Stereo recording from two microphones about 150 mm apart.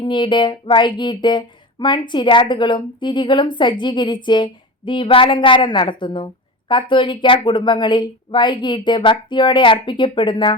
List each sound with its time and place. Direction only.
0.0 s speech: 30° left (ahead or behind)